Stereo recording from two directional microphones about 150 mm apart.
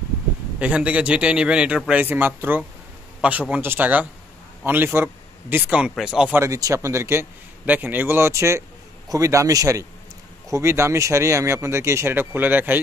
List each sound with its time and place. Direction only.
0.6 s speech: 10° right (ahead or behind)
6.4 s a man's voice: 20° right (ahead or behind)